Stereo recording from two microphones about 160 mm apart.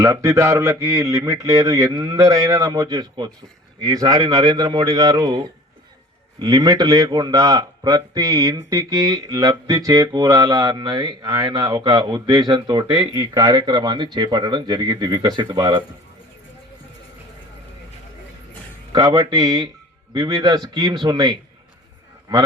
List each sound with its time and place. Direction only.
0.0 s a man's voice: 20° right (ahead or behind)
18.9 s a man's voice: 25° right (ahead or behind)